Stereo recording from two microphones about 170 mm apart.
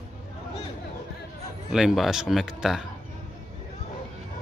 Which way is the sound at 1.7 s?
Centre (ahead or behind).